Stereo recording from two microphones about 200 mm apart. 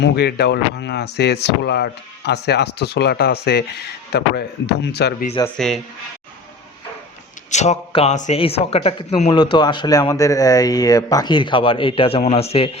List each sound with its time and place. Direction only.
0.0 s speech: 55° left (ahead or behind)
5.5 s speech: centre (ahead or behind)
7.5 s a man's voice: 35° left (ahead or behind)